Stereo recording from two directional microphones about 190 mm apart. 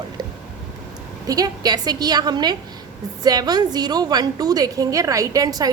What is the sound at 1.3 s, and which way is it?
A woman's voice, 20° right (ahead or behind).